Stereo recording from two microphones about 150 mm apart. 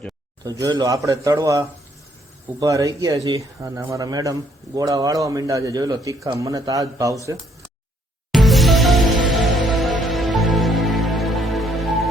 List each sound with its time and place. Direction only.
0.4 s a man's voice: 25° right (ahead or behind)
8.3 s music: centre (ahead or behind)